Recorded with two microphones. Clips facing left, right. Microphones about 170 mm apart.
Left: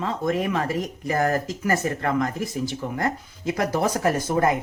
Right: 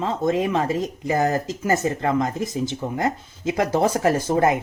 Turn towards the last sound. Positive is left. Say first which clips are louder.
# right 2 dB
turn(degrees=-25)  # may be behind; listen again after turning